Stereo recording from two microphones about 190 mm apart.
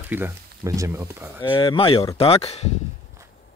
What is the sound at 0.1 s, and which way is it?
Speech, 15° right (ahead or behind).